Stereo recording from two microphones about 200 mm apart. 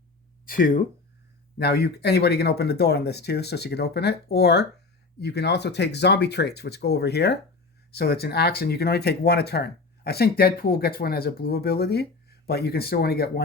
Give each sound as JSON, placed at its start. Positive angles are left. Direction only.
{"t": 0.4, "sound": "speech", "side_deg": 45}